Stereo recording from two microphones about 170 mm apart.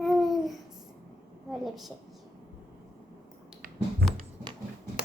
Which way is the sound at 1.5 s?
Centre (ahead or behind).